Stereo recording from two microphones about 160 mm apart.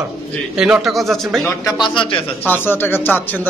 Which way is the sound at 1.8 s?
30° left (ahead or behind).